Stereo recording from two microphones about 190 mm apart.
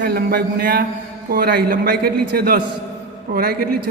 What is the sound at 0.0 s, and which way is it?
A man's voice, 55° right (ahead or behind).